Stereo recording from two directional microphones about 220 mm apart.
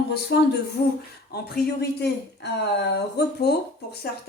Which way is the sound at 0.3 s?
45° left (ahead or behind).